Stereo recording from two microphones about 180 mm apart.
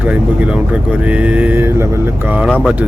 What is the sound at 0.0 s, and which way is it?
Speech, 10° right (ahead or behind).